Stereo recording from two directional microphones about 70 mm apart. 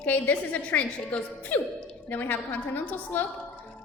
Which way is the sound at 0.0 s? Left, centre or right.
Left.